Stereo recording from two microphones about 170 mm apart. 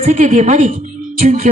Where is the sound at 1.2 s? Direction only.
40° right (ahead or behind).